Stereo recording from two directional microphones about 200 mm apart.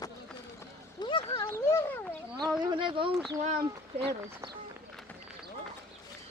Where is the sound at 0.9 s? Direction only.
25° left (ahead or behind).